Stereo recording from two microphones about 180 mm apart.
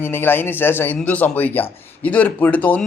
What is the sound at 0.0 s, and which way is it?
Speech, 10° left (ahead or behind).